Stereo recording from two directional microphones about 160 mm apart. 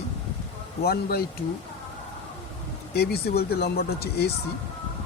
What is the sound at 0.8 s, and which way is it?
Speech, 75° left (ahead or behind).